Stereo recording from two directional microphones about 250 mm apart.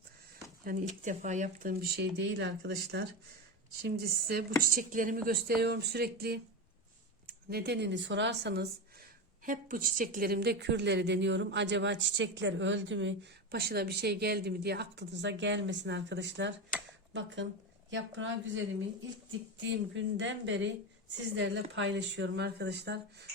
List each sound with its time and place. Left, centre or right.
0.6 s speech: right
7.5 s speech: right
9.5 s speech: right
19.9 s speech: right